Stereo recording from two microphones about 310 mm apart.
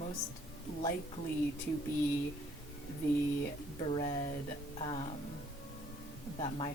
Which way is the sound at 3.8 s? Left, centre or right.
Centre.